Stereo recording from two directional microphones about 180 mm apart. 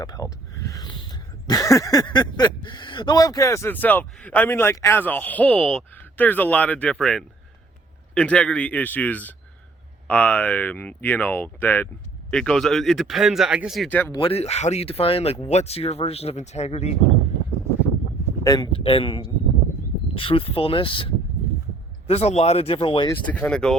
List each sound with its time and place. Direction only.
0.0 s speech: 20° left (ahead or behind)
14.1 s speech: 30° left (ahead or behind)
18.4 s speech: 20° left (ahead or behind)
23.0 s speech: 10° left (ahead or behind)